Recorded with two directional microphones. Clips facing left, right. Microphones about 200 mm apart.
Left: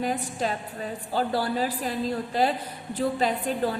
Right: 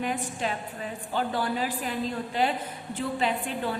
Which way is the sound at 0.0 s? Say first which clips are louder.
Left 2 dB; 40° left (ahead or behind).